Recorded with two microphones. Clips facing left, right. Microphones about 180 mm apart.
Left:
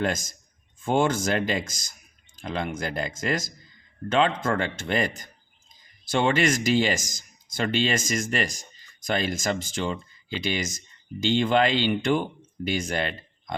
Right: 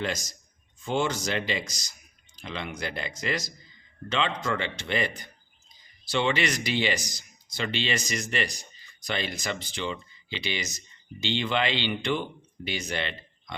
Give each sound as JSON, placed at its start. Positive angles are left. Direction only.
{"t": 0.0, "sound": "speech", "side_deg": 50}